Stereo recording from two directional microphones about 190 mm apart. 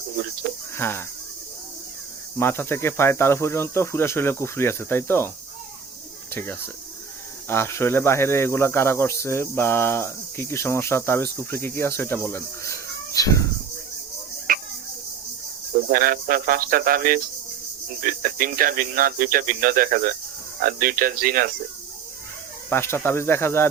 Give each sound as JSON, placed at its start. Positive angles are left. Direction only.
{"t": 0.4, "sound": "speech", "side_deg": -50}
{"t": 0.8, "sound": "speech", "side_deg": 10}
{"t": 2.4, "sound": "speech", "side_deg": 10}
{"t": 6.3, "sound": "speech", "side_deg": 10}
{"t": 14.5, "sound": "a sound", "side_deg": -50}
{"t": 15.7, "sound": "speech", "side_deg": -50}
{"t": 22.7, "sound": "speech", "side_deg": 15}